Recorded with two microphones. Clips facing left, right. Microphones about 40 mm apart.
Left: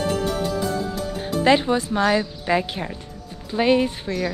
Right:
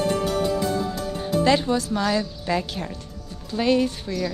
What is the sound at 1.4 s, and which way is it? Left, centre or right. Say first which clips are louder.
A woman's voice: left 4 dB; left.